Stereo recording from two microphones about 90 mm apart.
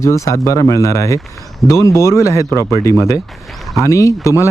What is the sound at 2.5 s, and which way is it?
Speech, 40° right (ahead or behind).